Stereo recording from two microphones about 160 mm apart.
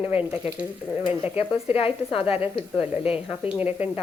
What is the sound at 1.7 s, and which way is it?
A woman's voice, 35° left (ahead or behind).